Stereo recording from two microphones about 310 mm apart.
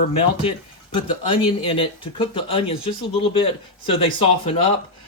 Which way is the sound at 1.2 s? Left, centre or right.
Centre.